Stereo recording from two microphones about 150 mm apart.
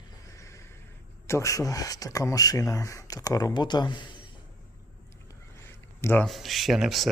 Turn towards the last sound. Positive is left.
turn(degrees=0)  # may be behind; listen again after turning